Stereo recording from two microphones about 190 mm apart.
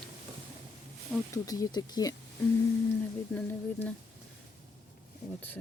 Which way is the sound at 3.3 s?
5° left (ahead or behind).